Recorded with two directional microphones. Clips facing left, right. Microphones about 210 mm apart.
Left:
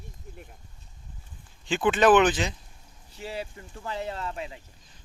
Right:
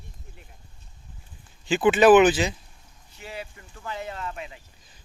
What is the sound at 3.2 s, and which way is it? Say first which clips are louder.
Speech: left 3 dB; 35° left (ahead or behind).